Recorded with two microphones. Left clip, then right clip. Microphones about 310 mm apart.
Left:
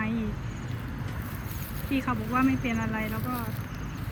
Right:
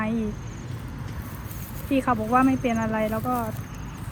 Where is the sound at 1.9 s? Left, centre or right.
Centre.